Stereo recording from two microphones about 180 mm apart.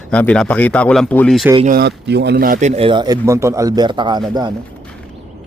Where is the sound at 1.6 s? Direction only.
60° right (ahead or behind); by 4.5 s 20° right (ahead or behind).